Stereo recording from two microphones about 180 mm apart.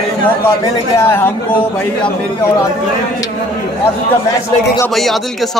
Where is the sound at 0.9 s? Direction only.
15° left (ahead or behind).